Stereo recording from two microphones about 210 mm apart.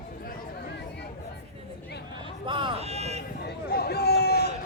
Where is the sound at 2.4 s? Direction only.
25° right (ahead or behind).